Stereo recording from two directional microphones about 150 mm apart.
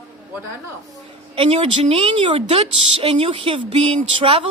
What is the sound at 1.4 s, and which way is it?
A woman's voice, 40° right (ahead or behind).